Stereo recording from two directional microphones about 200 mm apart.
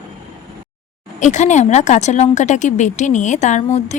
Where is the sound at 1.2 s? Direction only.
35° left (ahead or behind).